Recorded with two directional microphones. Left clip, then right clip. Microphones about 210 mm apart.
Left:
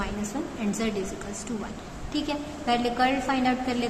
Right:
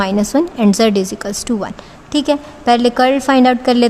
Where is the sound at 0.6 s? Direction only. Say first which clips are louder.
Right 15 dB; 65° right (ahead or behind).